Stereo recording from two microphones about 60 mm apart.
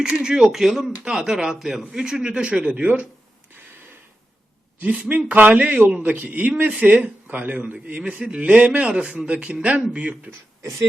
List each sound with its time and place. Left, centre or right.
0.0 s a man's voice: centre
4.8 s a man's voice: right